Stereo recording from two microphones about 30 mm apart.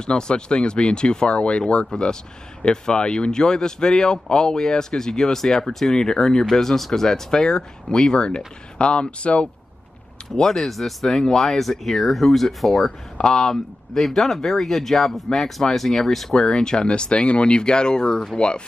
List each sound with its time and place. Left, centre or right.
0.0 s speech: left; by 5.9 s centre
5.9 s speech: left
10.3 s speech: centre
16.8 s speech: left